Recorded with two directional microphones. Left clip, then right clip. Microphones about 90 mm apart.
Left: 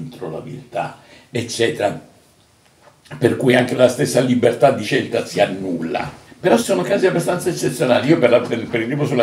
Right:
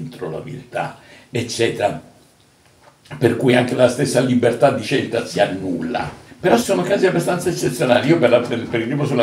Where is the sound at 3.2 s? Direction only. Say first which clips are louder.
Left 1 dB; 20° left (ahead or behind).